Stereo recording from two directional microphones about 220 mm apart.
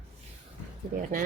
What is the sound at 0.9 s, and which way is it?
Speech, 40° right (ahead or behind).